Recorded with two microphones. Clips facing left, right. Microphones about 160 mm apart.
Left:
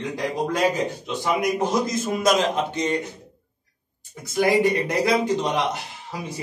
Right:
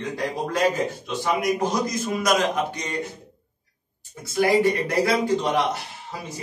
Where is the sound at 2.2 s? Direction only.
30° left (ahead or behind).